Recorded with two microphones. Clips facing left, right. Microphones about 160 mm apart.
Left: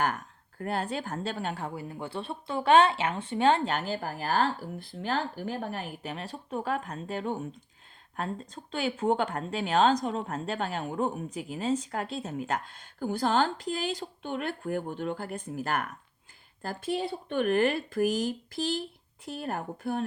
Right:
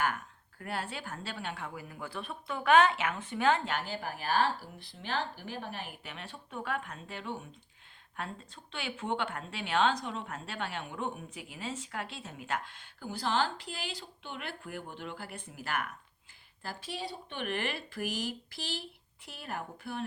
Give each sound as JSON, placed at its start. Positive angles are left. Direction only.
{"t": 0.6, "sound": "speech", "side_deg": 40}